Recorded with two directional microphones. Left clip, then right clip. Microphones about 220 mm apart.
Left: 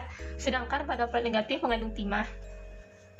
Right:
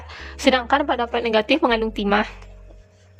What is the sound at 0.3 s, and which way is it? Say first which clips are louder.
A woman's voice: right 13 dB; 50° right (ahead or behind).